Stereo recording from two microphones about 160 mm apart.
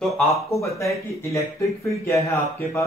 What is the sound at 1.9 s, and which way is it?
Speech, 20° left (ahead or behind).